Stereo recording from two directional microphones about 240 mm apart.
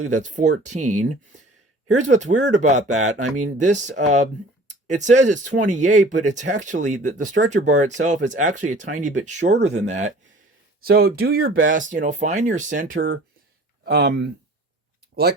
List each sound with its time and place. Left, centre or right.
0.1 s speech: right
10.8 s speech: right